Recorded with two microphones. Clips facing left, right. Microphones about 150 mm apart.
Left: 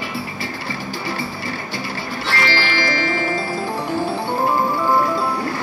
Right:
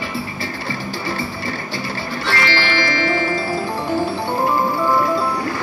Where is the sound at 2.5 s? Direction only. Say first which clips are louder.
Even; 40° left (ahead or behind).